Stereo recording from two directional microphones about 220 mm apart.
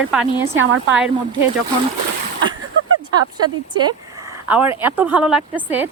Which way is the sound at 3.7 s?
20° right (ahead or behind).